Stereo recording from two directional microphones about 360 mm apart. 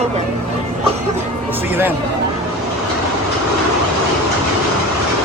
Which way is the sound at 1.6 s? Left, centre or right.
Centre.